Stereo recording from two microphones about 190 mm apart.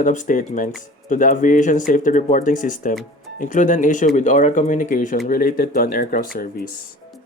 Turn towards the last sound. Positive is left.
turn(degrees=50)  # may be behind; listen again after turning